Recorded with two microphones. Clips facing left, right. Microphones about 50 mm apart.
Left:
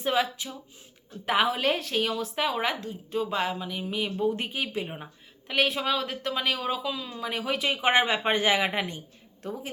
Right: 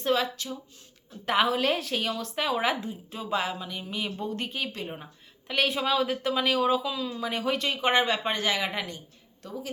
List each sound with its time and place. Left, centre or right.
0.0 s speech: centre
1.2 s speech: centre
7.7 s speech: centre